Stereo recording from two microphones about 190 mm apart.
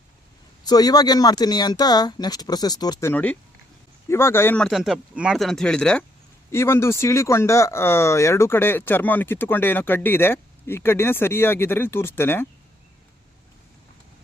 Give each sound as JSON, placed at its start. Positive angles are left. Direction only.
{"t": 0.6, "sound": "speech", "side_deg": 20}